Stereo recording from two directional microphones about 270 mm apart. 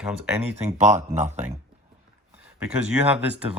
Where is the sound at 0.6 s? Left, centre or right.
Right.